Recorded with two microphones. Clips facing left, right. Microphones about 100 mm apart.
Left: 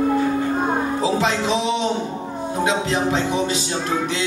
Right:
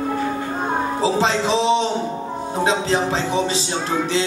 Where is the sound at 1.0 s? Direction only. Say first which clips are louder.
Right 1 dB; 30° right (ahead or behind).